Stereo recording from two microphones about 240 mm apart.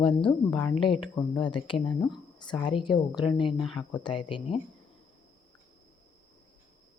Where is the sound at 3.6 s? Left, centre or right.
Centre.